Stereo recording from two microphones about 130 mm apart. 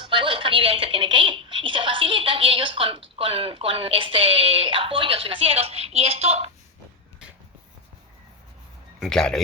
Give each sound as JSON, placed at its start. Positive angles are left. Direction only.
{"t": 0.0, "sound": "a woman's voice", "side_deg": -40}
{"t": 9.0, "sound": "speech", "side_deg": 5}